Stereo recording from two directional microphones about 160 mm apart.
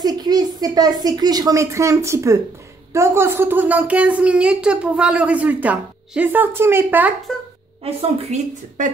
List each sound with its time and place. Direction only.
0.0 s a woman's voice: 25° right (ahead or behind)
7.8 s a woman's voice: 40° right (ahead or behind)